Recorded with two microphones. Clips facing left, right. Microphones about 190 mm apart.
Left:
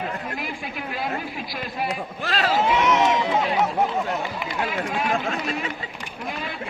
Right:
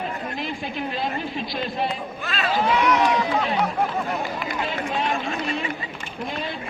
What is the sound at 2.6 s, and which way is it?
Speech, 25° left (ahead or behind).